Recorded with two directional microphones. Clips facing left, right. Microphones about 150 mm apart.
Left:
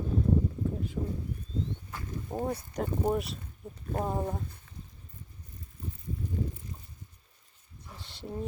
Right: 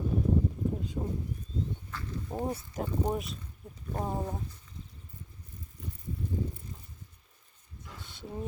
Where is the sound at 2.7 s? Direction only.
Centre (ahead or behind).